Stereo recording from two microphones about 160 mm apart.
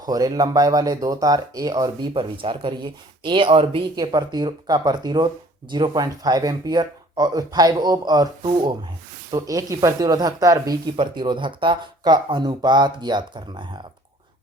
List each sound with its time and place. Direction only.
0.0 s speech: 25° right (ahead or behind)